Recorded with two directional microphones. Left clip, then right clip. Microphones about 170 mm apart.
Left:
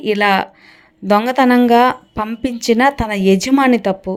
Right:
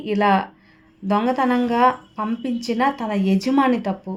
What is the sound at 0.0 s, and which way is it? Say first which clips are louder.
Speech: left 5 dB; 40° left (ahead or behind).